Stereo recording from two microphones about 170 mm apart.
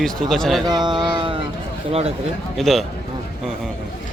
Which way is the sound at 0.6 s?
25° right (ahead or behind).